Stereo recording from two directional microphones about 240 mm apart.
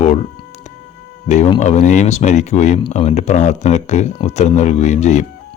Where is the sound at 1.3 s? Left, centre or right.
Left.